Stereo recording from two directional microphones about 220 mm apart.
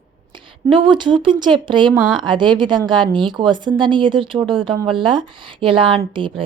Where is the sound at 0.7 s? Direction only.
20° right (ahead or behind).